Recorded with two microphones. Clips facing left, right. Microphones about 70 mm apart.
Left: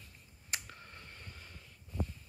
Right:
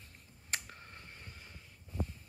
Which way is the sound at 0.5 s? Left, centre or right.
Right.